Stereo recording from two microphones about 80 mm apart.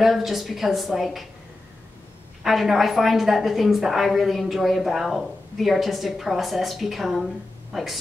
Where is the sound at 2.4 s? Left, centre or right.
Centre.